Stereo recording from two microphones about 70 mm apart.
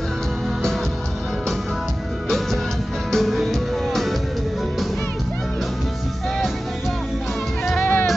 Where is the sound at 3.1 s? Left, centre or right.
Centre.